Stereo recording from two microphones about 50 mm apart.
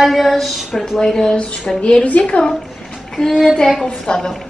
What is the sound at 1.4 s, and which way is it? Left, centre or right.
A woman's voice, left.